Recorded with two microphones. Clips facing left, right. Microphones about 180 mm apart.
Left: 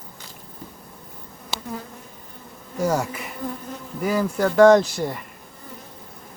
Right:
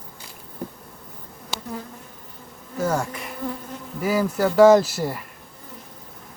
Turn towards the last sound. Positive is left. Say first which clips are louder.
# even
turn(degrees=-5)  # may be behind; listen again after turning